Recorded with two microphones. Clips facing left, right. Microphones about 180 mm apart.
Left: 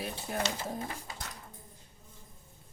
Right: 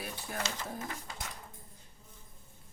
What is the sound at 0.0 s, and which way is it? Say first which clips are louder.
Speech: left 4 dB; 25° left (ahead or behind).